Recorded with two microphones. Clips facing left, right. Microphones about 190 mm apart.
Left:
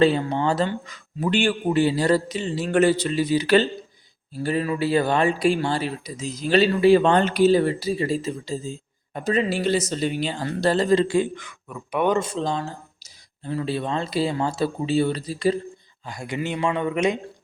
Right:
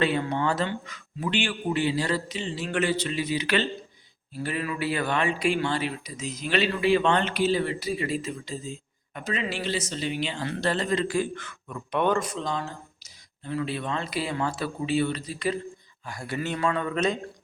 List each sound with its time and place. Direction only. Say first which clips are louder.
0.0 s speech: left 6 dB; 30° left (ahead or behind)
11.3 s a man's voice: left 1 dB; 10° left (ahead or behind)
12.1 s speech: left 4 dB; 25° left (ahead or behind)
16.0 s a man's voice: left 3 dB; 20° left (ahead or behind)